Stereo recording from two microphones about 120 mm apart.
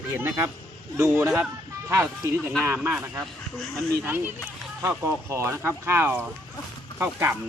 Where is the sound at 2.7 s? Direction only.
15° right (ahead or behind).